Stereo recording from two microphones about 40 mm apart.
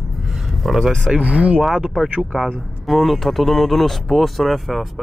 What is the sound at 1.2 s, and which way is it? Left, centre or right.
Speech, right.